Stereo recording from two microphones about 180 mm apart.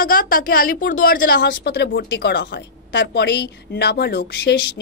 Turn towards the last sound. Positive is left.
turn(degrees=65)  # may be behind; listen again after turning